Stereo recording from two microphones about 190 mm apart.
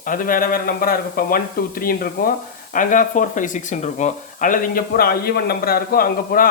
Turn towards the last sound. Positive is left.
turn(degrees=50)  # may be behind; listen again after turning